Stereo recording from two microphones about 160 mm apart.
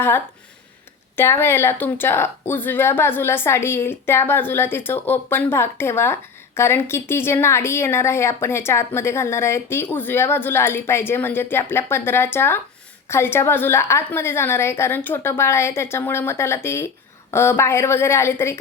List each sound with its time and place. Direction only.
1.1 s a woman's voice: 15° left (ahead or behind)